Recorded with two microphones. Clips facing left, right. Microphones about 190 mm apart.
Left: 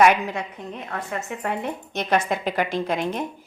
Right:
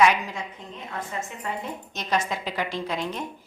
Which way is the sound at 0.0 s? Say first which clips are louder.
Left 3 dB; 60° left (ahead or behind).